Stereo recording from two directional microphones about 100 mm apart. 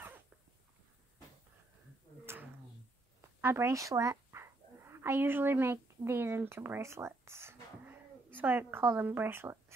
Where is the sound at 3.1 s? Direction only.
25° right (ahead or behind).